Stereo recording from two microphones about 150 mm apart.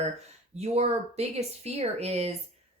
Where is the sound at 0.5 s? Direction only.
45° right (ahead or behind).